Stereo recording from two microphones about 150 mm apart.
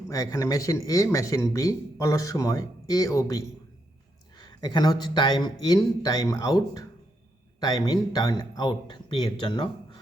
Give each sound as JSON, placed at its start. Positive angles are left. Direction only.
{"t": 0.1, "sound": "speech", "side_deg": 25}